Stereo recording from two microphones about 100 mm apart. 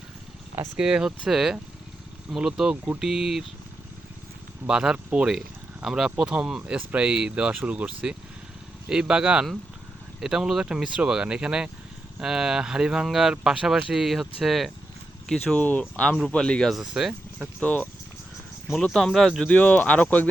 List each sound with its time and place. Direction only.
0.8 s speech: 10° right (ahead or behind)
4.6 s speech: 10° right (ahead or behind)
17.6 s speech: 15° left (ahead or behind)
18.7 s speech: 5° left (ahead or behind)